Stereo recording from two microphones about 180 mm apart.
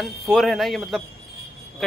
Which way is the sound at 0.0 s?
Centre (ahead or behind).